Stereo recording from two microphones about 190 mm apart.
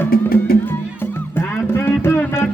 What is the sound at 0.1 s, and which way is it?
Music, 50° left (ahead or behind).